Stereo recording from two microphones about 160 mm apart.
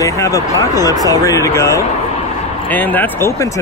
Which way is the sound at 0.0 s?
20° left (ahead or behind).